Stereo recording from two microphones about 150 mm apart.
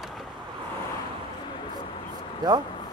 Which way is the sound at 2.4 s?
30° right (ahead or behind).